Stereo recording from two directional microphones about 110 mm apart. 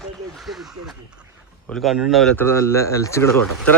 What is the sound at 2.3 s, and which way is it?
Speech, 20° left (ahead or behind).